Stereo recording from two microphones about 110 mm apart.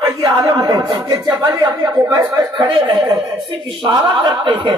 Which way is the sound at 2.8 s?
40° right (ahead or behind).